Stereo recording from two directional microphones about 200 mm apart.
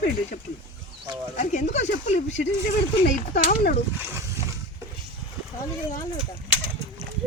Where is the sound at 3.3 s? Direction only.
40° left (ahead or behind).